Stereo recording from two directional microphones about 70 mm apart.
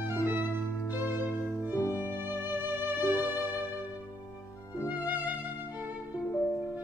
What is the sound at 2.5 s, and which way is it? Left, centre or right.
Music, right.